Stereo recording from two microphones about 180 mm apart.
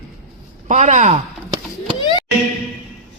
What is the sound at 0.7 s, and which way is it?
Speech, 40° right (ahead or behind).